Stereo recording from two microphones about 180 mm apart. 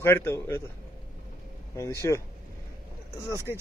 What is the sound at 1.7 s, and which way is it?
Speech, 15° left (ahead or behind).